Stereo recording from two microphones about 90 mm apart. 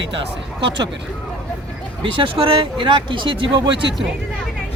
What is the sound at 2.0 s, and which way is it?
Speech, 75° right (ahead or behind).